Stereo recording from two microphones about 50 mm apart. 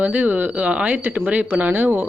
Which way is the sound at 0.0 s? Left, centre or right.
Right.